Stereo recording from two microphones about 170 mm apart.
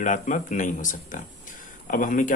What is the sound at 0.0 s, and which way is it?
A man's voice, 45° left (ahead or behind).